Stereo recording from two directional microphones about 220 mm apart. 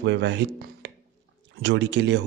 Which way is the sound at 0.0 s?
50° right (ahead or behind).